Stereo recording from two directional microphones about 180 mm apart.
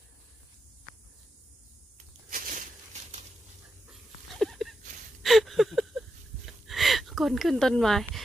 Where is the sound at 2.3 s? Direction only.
50° right (ahead or behind).